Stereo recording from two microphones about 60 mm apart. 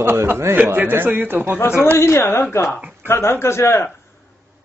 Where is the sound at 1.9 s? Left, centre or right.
Left.